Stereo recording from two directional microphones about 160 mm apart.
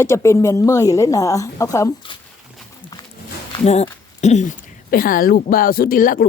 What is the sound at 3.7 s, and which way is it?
Speech, 45° left (ahead or behind).